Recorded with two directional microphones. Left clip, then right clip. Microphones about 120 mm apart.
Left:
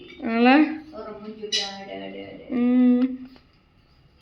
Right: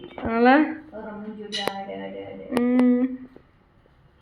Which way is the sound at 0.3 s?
35° left (ahead or behind).